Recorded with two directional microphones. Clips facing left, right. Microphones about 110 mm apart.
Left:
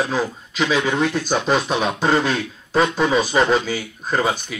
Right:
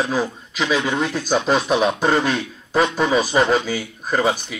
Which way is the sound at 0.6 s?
25° left (ahead or behind).